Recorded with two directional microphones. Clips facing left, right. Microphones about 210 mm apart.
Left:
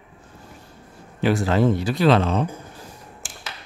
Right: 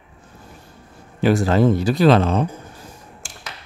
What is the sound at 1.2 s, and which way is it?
Speech, 40° right (ahead or behind).